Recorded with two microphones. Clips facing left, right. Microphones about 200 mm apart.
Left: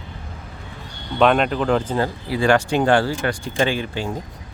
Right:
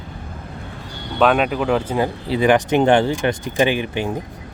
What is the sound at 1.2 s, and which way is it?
Speech, 5° right (ahead or behind).